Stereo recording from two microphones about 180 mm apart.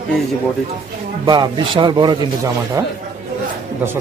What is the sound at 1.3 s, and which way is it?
A man's voice, 25° right (ahead or behind).